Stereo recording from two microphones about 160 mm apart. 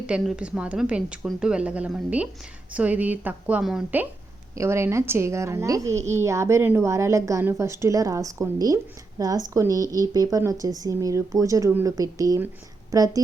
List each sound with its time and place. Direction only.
0.1 s a woman's voice: 5° right (ahead or behind)
4.5 s a woman's voice: 15° right (ahead or behind)